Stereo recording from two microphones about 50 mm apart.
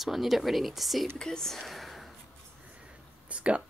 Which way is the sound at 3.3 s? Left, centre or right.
Right.